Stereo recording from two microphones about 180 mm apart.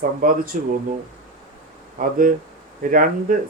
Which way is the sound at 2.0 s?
50° right (ahead or behind).